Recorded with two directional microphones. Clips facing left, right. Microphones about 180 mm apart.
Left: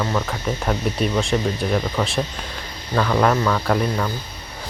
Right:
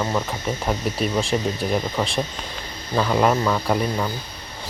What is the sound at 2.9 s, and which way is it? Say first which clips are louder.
Speech: left 1 dB; 10° right (ahead or behind).